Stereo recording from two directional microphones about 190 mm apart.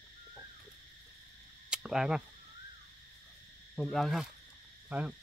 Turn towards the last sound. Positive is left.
turn(degrees=-10)  # may be behind; listen again after turning